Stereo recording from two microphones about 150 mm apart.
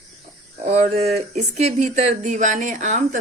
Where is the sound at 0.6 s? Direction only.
40° right (ahead or behind).